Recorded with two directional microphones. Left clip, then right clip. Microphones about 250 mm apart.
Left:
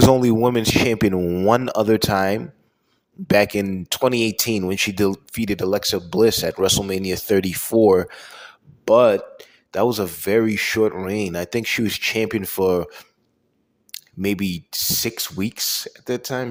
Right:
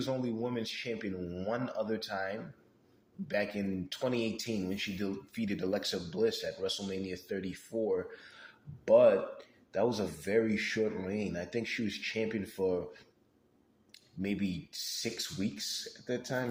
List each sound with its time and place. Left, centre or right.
0.1 s speech: left